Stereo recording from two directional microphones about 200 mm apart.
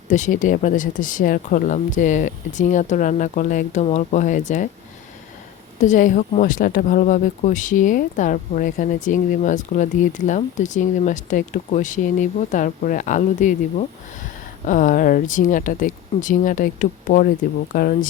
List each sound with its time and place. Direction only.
0.1 s speech: 40° left (ahead or behind)
5.8 s speech: 40° left (ahead or behind)